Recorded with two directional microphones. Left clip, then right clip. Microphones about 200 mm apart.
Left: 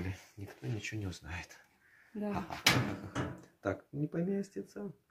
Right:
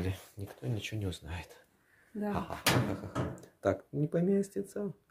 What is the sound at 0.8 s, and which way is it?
Speech, 35° right (ahead or behind).